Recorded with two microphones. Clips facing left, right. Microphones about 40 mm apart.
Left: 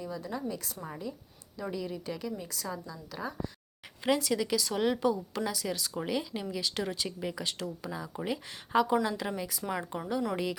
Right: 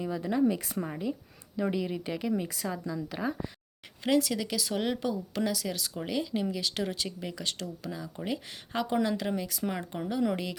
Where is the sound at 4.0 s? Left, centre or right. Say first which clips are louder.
Right 1 dB; centre.